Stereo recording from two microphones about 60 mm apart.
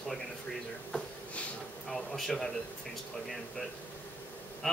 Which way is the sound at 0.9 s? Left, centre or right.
Centre.